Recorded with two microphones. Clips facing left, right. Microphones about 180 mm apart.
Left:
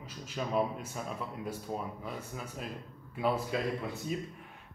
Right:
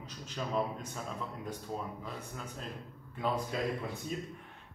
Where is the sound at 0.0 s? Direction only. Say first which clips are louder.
Left 2 dB; 10° left (ahead or behind).